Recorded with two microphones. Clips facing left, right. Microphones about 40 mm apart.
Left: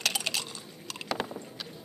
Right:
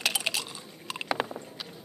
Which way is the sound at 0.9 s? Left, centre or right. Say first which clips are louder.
Right 3 dB; right.